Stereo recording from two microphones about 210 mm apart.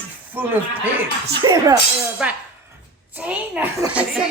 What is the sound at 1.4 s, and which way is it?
Speech, 20° right (ahead or behind).